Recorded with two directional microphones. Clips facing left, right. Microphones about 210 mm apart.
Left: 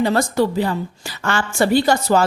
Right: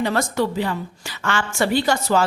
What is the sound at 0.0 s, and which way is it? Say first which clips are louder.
A woman's voice: left 4 dB; 35° left (ahead or behind).